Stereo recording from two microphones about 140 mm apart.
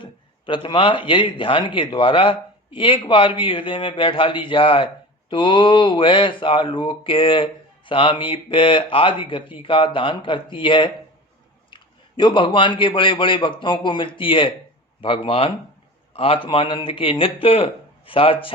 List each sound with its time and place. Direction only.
0.0 s speech: 35° left (ahead or behind)